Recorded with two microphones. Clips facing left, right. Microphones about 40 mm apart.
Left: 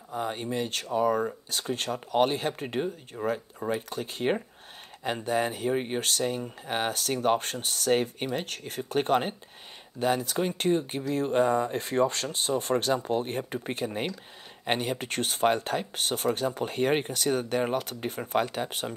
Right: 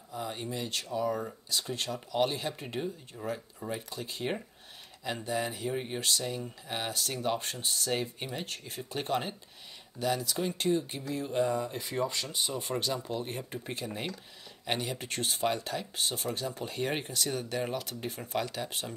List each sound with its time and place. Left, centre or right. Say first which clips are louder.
0.1 s speech: left 6 dB; left
12.9 s speech: left 7 dB; left